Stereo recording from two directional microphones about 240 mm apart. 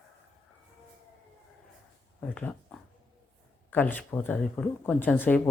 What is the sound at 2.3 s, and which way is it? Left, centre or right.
Speech, centre.